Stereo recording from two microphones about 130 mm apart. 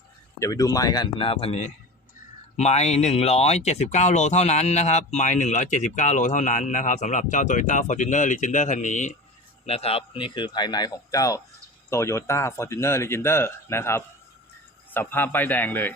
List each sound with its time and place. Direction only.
0.3 s a man's voice: 25° left (ahead or behind); by 9.1 s 70° left (ahead or behind)
9.6 s a man's voice: 50° left (ahead or behind); by 15.9 s 15° left (ahead or behind)